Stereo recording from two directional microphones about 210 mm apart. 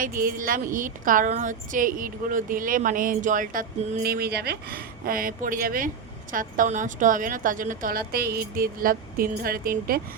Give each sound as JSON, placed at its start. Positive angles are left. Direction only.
{"t": 0.2, "sound": "a woman's voice", "side_deg": -45}